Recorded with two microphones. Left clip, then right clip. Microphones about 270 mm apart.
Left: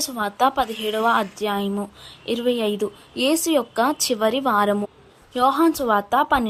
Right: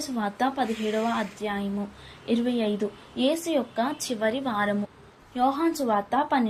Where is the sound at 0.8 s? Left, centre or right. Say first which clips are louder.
Left 10 dB; left.